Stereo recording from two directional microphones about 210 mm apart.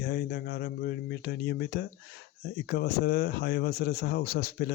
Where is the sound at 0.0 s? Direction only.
50° left (ahead or behind).